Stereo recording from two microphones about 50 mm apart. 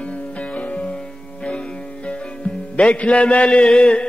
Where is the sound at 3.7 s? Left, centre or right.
Centre.